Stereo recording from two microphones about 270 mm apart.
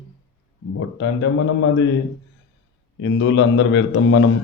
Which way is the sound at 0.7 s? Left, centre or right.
Left.